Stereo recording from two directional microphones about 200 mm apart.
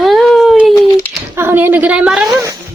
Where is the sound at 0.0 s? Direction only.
Centre (ahead or behind).